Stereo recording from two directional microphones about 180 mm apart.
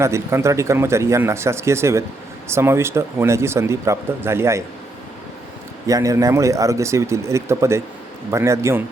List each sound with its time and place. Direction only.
0.0 s speech: 15° right (ahead or behind)
5.9 s speech: 15° right (ahead or behind)